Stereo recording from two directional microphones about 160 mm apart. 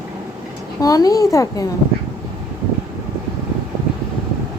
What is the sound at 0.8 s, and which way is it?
Speech, 20° left (ahead or behind).